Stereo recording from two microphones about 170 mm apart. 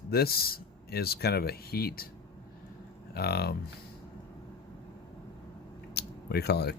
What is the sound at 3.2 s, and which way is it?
Speech, 70° left (ahead or behind).